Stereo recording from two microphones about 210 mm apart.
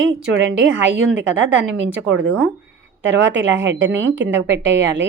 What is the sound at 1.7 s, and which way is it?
A woman's voice, 65° right (ahead or behind).